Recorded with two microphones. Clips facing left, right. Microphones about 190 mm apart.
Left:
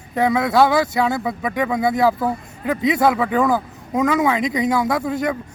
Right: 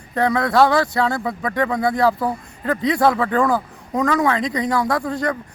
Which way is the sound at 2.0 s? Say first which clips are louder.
Left 1 dB; 5° left (ahead or behind).